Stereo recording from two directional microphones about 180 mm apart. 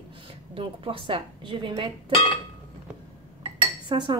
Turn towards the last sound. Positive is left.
turn(degrees=-25)  # may be behind; listen again after turning